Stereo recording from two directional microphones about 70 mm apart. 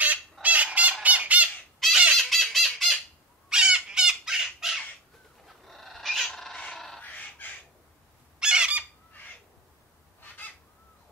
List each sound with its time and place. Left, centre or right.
0.0 s fowl: right
2.1 s chicken: centre
3.4 s bird: centre
5.4 s cat: centre
7.0 s chicken: left
8.4 s fowl: centre